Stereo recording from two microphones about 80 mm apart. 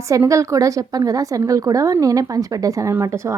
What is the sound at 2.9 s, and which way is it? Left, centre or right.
Speech, right.